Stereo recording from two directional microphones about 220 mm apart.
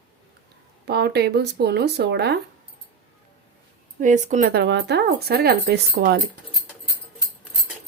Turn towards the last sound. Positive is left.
turn(degrees=-45)  # may be behind; listen again after turning